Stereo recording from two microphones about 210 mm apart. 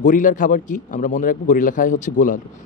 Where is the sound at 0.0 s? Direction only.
40° left (ahead or behind).